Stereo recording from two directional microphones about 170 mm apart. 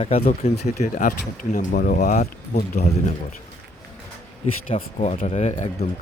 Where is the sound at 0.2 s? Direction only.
50° left (ahead or behind).